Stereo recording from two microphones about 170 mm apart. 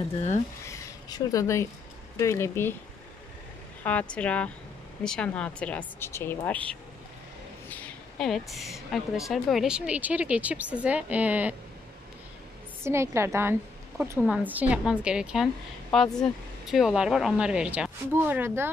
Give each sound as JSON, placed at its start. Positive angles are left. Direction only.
{"t": 0.7, "sound": "speech", "side_deg": 20}
{"t": 3.8, "sound": "a woman's voice", "side_deg": 5}
{"t": 12.8, "sound": "a woman's voice", "side_deg": -15}